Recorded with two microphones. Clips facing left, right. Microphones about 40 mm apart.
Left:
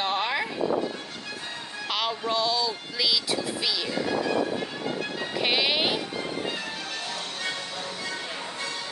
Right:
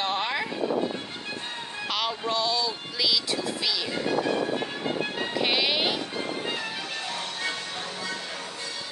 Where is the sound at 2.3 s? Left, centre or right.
Centre.